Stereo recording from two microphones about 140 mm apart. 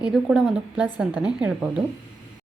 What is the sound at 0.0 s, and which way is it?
A woman's voice, 5° right (ahead or behind).